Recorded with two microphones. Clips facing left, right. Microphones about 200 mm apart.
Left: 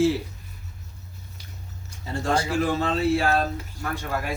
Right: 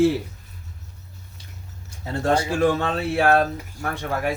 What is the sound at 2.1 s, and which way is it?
Speech, 60° right (ahead or behind).